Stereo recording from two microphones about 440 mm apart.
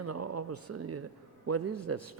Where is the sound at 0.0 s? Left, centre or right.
Right.